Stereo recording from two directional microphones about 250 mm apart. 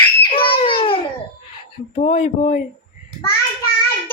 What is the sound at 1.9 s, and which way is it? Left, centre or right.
Speech, left.